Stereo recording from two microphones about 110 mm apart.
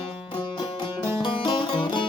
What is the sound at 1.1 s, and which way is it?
Music, 45° left (ahead or behind).